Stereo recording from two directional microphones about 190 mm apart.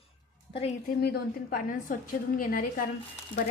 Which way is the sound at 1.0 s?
55° left (ahead or behind).